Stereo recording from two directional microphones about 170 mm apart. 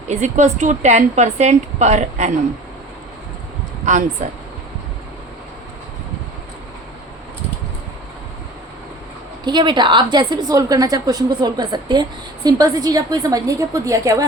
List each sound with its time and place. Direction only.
0.1 s a woman's voice: 45° right (ahead or behind)
3.8 s a woman's voice: 45° right (ahead or behind)
9.4 s a woman's voice: 25° right (ahead or behind)